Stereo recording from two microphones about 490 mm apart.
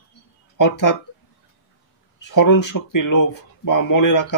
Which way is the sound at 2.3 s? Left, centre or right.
Left.